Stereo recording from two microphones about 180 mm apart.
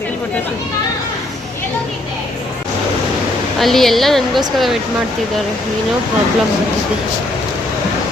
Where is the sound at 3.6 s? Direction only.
Centre (ahead or behind).